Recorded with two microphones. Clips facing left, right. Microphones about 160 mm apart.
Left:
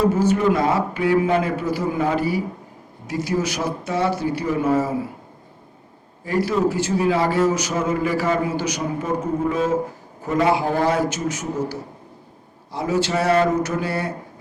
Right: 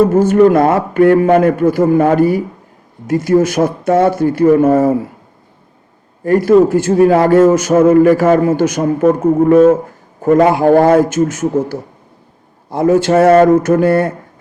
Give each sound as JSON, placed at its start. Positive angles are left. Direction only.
{"t": 0.0, "sound": "a man's voice", "side_deg": -50}
{"t": 6.2, "sound": "a man's voice", "side_deg": -50}